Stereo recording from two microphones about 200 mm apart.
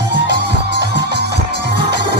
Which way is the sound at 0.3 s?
55° right (ahead or behind).